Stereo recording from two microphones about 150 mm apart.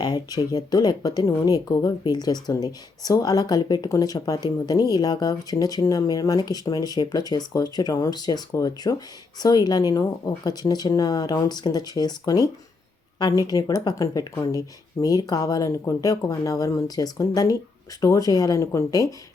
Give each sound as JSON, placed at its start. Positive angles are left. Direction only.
{"t": 0.0, "sound": "speech", "side_deg": 25}